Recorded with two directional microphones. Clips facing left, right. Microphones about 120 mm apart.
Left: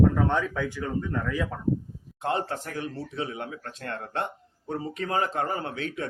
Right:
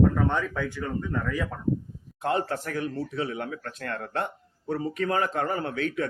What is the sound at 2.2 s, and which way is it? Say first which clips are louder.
Speech: right 2 dB; 25° left (ahead or behind).